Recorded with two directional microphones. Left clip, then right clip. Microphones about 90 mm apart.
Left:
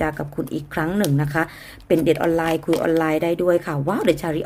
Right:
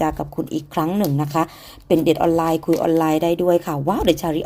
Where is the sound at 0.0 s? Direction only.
35° right (ahead or behind).